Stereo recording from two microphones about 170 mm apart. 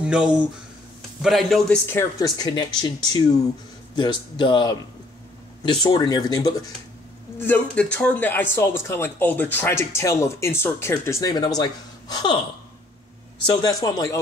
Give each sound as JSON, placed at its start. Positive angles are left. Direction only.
{"t": 0.0, "sound": "a man's voice", "side_deg": -5}
{"t": 1.9, "sound": "speech", "side_deg": 20}
{"t": 7.3, "sound": "speech", "side_deg": 10}
{"t": 13.5, "sound": "speech", "side_deg": 25}